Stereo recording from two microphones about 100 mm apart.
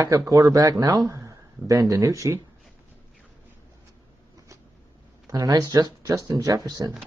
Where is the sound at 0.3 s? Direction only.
35° right (ahead or behind).